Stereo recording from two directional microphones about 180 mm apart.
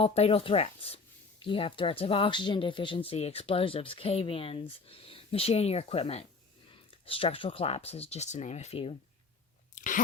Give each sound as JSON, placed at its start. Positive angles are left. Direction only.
{"t": 0.0, "sound": "speech", "side_deg": 35}
{"t": 9.7, "sound": "chewing", "side_deg": 45}